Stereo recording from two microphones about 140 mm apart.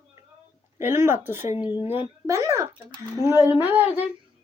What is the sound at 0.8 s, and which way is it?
A woman's voice, 15° right (ahead or behind).